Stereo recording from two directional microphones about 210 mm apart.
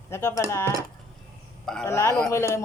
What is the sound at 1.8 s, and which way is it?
Speech, 15° left (ahead or behind).